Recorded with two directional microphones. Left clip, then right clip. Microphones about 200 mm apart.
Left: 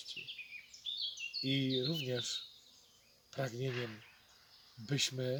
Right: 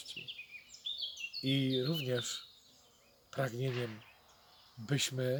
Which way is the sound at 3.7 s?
55° right (ahead or behind).